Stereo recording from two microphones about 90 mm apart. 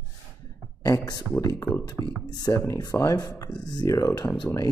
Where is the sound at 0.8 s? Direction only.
45° left (ahead or behind).